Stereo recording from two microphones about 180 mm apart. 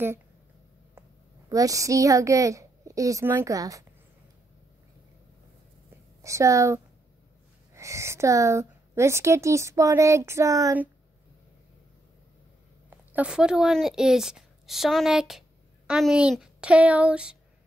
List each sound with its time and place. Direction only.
1.5 s a woman's voice: 20° right (ahead or behind)
6.2 s a woman's voice: 15° right (ahead or behind)
13.1 s a woman's voice: 5° right (ahead or behind)